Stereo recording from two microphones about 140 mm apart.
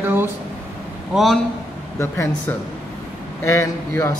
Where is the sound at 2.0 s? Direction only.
20° left (ahead or behind).